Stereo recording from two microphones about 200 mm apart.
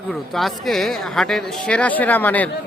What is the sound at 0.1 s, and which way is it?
Speech, centre (ahead or behind).